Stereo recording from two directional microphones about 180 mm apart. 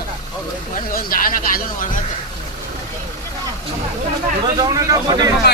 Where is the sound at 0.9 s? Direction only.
50° left (ahead or behind).